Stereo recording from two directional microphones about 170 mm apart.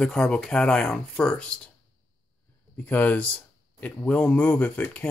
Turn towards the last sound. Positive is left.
turn(degrees=10)  # may be behind; listen again after turning